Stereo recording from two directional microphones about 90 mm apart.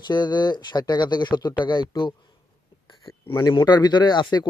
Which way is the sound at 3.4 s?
55° left (ahead or behind).